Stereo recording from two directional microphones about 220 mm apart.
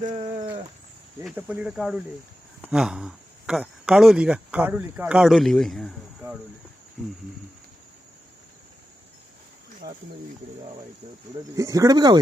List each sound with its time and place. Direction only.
0.0 s speech: 35° right (ahead or behind)
1.2 s speech: 5° right (ahead or behind)
9.8 s speech: 15° right (ahead or behind)
11.5 s speech: 15° right (ahead or behind)